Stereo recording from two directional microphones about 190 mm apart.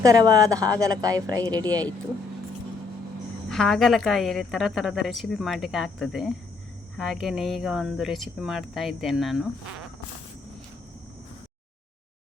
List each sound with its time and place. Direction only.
0.0 s speech: 20° right (ahead or behind)
3.5 s a woman's voice: centre (ahead or behind)